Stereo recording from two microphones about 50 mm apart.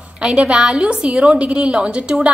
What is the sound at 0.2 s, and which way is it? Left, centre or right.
A woman's voice, centre.